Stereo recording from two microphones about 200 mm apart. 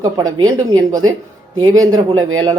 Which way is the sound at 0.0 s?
20° right (ahead or behind).